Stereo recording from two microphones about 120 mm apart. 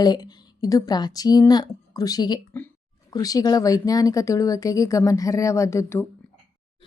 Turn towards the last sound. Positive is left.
turn(degrees=20)  # may be behind; listen again after turning